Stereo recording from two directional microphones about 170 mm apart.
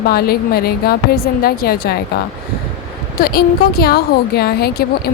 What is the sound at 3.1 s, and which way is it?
A woman's voice, 60° left (ahead or behind).